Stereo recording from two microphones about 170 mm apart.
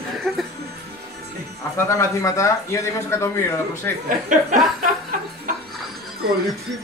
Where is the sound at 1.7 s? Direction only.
20° left (ahead or behind).